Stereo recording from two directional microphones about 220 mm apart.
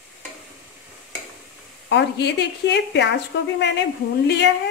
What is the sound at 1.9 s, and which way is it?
A woman's voice, 50° left (ahead or behind).